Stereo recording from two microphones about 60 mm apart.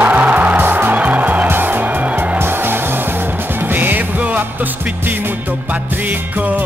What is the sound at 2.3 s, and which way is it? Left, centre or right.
Music, right.